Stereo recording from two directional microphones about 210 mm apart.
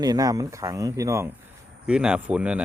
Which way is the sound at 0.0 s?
20° right (ahead or behind).